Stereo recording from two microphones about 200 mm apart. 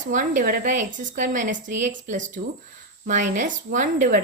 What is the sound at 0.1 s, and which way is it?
A woman's voice, 40° right (ahead or behind).